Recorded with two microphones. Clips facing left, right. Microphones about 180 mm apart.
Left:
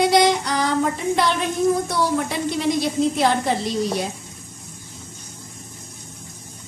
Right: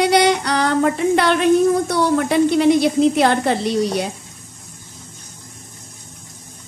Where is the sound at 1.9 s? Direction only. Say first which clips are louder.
Right 5 dB; 65° right (ahead or behind).